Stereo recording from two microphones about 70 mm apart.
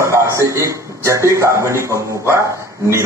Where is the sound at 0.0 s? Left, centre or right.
Right.